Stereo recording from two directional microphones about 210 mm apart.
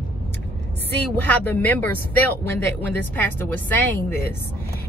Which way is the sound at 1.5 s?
10° left (ahead or behind).